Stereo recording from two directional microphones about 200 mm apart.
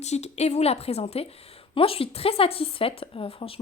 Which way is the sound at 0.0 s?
35° left (ahead or behind).